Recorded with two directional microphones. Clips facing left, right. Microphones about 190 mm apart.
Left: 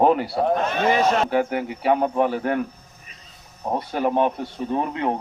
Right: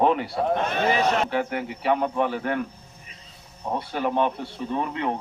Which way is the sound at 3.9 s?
40° left (ahead or behind).